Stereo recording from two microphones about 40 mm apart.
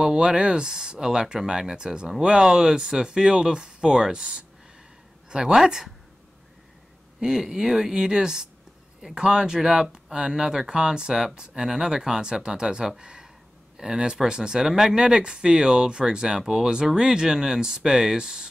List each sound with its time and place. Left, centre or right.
0.0 s speech: centre
5.5 s speech: centre
7.2 s speech: centre
14.7 s speech: centre
15.0 s speech: centre